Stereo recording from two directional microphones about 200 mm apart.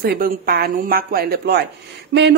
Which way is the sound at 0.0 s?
50° right (ahead or behind).